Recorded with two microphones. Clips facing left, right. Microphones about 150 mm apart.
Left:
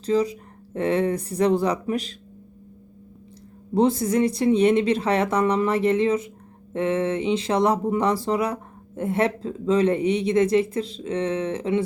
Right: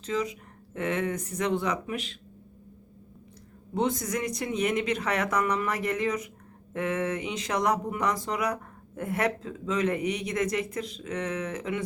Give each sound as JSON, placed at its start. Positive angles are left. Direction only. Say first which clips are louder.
{"t": 0.0, "sound": "speech", "louder": "left 8 dB", "side_deg": 35}
{"t": 3.8, "sound": "speech", "louder": "left 9 dB", "side_deg": 30}